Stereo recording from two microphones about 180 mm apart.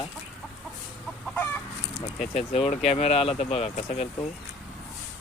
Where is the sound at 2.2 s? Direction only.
35° left (ahead or behind).